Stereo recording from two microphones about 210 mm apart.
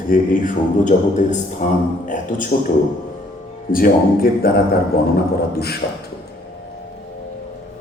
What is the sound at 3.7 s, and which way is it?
A man's voice, 45° left (ahead or behind).